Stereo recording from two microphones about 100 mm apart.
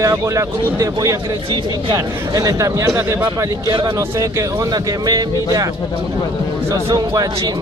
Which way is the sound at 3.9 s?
30° right (ahead or behind).